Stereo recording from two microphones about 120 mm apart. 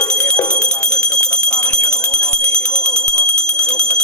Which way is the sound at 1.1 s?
10° left (ahead or behind).